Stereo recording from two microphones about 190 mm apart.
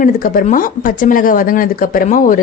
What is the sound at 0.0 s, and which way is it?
Speech, 45° left (ahead or behind).